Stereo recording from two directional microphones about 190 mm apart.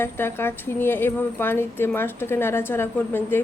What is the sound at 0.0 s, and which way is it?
Speech, 10° left (ahead or behind).